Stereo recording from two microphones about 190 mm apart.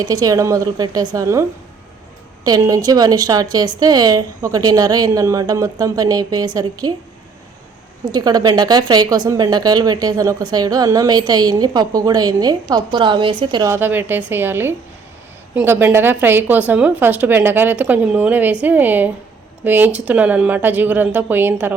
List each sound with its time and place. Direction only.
0.0 s a woman's voice: 20° right (ahead or behind)
8.1 s a woman's voice: 20° right (ahead or behind)